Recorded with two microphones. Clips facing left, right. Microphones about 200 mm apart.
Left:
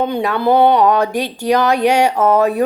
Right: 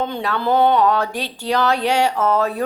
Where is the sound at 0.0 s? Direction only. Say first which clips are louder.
Left 6 dB; 15° left (ahead or behind).